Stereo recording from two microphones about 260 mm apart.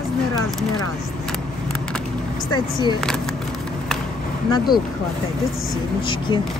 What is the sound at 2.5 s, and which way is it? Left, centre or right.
Speech, centre.